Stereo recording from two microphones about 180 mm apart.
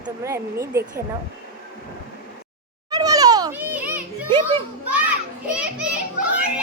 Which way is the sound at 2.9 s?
20° right (ahead or behind).